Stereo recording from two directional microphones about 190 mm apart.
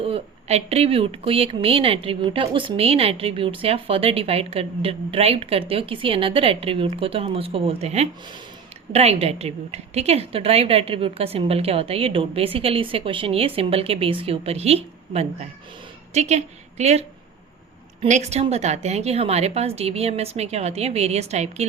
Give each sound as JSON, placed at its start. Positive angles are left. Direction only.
{"t": 0.0, "sound": "a woman's voice", "side_deg": -30}